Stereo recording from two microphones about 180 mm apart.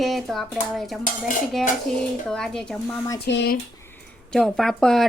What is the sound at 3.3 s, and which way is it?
Speech, 75° left (ahead or behind).